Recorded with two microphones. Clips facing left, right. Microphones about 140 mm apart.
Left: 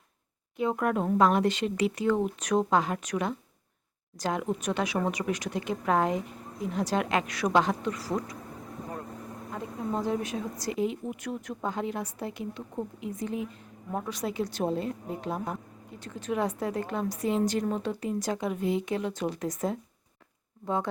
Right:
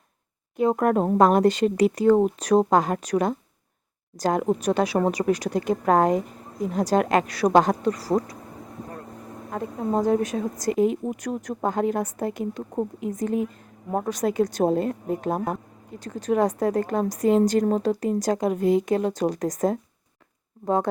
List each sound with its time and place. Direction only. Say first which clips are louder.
0.5 s speech: right 7 dB; 45° right (ahead or behind)
9.8 s a woman's voice: right 8 dB; 45° right (ahead or behind)